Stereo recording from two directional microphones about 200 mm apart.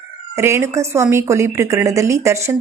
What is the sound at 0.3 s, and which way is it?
A woman's voice, 15° right (ahead or behind).